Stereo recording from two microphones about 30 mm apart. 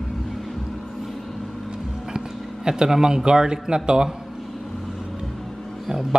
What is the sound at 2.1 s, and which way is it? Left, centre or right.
Speech, right.